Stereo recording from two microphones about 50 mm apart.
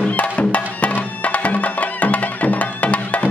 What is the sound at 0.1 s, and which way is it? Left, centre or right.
Music, left.